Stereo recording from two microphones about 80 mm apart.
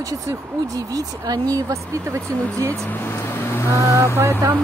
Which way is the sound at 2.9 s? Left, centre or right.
Left.